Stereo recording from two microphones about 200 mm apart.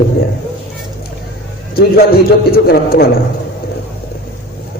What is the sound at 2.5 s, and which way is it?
Speech, 50° left (ahead or behind).